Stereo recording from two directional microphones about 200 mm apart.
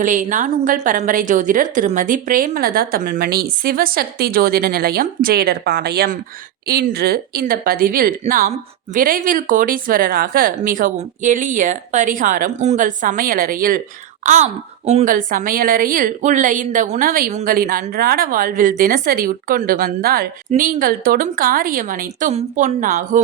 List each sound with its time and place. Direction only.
0.0 s a woman's voice: 40° right (ahead or behind)